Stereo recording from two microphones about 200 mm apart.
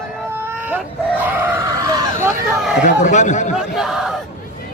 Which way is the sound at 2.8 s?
40° left (ahead or behind).